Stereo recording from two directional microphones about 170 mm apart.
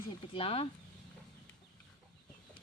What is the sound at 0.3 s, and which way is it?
Speech, 35° left (ahead or behind).